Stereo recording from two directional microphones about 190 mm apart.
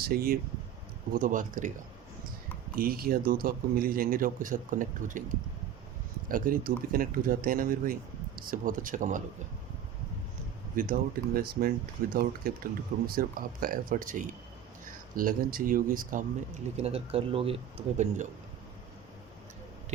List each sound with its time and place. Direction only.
0.0 s a man's voice: 50° right (ahead or behind)
2.7 s a man's voice: 50° right (ahead or behind)
6.2 s a man's voice: 45° right (ahead or behind)
10.8 s a man's voice: 45° right (ahead or behind)
16.7 s speech: 30° right (ahead or behind)